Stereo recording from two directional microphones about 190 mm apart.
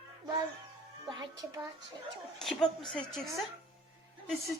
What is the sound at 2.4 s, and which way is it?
A woman's voice, centre (ahead or behind).